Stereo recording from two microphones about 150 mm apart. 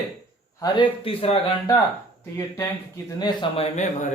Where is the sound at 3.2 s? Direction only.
30° left (ahead or behind).